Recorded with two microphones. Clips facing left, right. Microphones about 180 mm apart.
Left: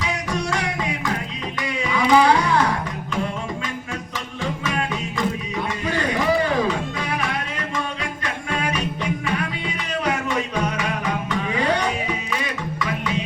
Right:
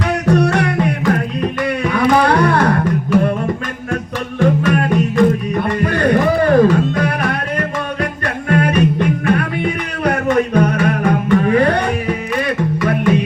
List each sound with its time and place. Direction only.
0.0 s music: 60° right (ahead or behind)
4.4 s music: 55° right (ahead or behind)